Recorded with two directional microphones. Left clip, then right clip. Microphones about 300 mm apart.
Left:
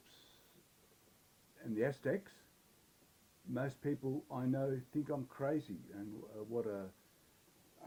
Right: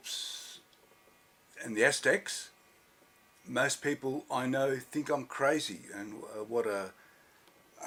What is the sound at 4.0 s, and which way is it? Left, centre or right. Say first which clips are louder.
Speech: right 7 dB; right.